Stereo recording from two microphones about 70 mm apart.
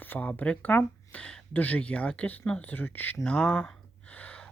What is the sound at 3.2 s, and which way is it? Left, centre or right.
Speech, centre.